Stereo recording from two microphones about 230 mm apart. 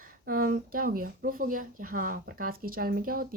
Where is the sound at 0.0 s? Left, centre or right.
Right.